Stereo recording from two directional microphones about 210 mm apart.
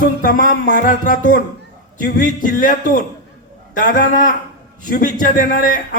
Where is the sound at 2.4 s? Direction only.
40° left (ahead or behind).